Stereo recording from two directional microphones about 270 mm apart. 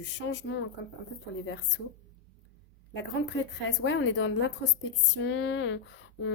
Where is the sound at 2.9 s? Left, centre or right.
Left.